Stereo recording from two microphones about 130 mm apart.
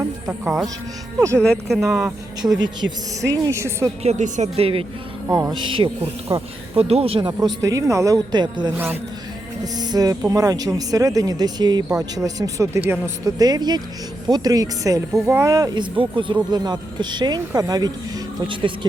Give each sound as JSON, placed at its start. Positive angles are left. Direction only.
{"t": 1.4, "sound": "speech", "side_deg": 5}
{"t": 2.4, "sound": "speech", "side_deg": -20}
{"t": 4.0, "sound": "speech", "side_deg": -60}
{"t": 5.3, "sound": "speech", "side_deg": -30}
{"t": 7.4, "sound": "speech", "side_deg": -25}
{"t": 9.7, "sound": "speech", "side_deg": -30}